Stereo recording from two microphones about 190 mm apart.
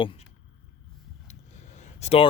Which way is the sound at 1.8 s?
35° left (ahead or behind).